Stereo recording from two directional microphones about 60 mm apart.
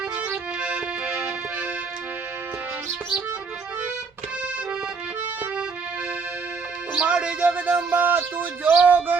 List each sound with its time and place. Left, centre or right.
0.2 s music: centre
7.0 s music: centre